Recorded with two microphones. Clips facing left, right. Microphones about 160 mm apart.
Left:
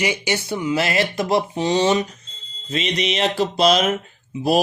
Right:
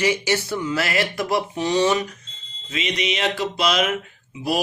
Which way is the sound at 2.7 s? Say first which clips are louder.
Left 3 dB; 35° left (ahead or behind).